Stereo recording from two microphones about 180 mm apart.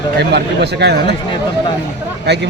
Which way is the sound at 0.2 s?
65° right (ahead or behind).